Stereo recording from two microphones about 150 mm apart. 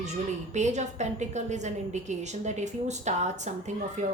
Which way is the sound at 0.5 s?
50° right (ahead or behind).